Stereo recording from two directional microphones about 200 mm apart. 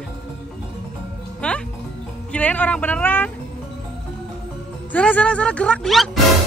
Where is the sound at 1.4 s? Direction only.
5° left (ahead or behind).